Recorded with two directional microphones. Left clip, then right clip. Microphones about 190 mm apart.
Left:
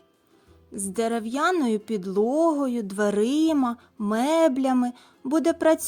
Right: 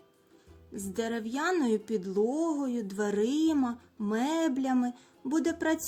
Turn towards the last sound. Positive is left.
turn(degrees=45)  # may be behind; listen again after turning